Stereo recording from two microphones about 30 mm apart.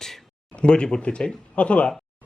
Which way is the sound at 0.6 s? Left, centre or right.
Left.